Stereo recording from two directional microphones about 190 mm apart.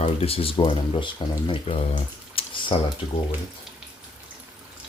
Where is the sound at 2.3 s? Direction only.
25° left (ahead or behind).